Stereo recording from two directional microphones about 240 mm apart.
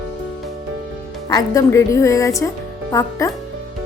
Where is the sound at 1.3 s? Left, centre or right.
Centre.